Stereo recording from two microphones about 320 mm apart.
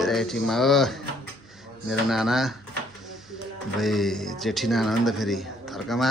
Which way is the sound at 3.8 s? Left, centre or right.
Centre.